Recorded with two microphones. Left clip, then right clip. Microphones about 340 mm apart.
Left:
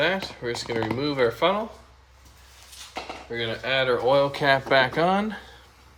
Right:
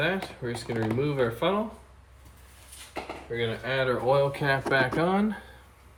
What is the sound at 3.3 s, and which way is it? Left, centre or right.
Speech, left.